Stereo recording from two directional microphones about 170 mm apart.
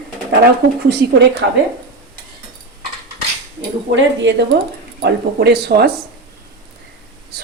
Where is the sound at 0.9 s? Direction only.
70° right (ahead or behind).